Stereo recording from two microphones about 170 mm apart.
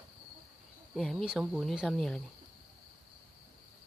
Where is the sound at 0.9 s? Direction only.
Centre (ahead or behind).